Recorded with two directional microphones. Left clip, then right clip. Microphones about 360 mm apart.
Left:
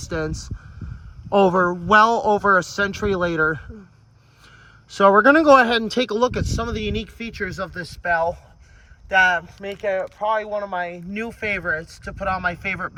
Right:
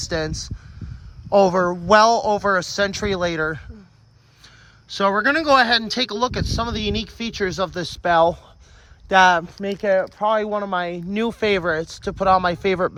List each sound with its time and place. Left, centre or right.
0.0 s speech: centre
0.8 s a sound: centre
1.3 s speech: centre
7.9 s speech: right
12.4 s speech: centre